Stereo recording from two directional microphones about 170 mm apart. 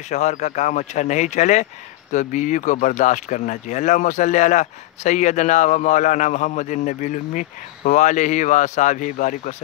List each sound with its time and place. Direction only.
0.1 s speech: 45° left (ahead or behind)